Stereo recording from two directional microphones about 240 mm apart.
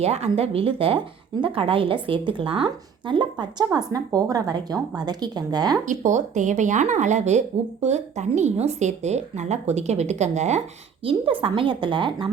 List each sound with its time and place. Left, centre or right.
0.0 s speech: right
5.8 s speech: right